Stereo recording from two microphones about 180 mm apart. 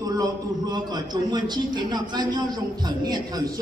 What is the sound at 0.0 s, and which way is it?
A woman's voice, 20° right (ahead or behind).